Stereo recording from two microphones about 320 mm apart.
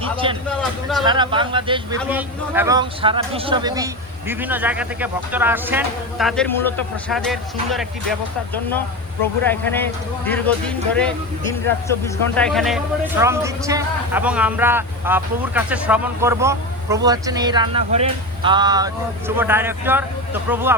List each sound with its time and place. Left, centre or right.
0.0 s speech: centre
0.5 s speech: centre
1.0 s a man's voice: centre
9.5 s a man's voice: centre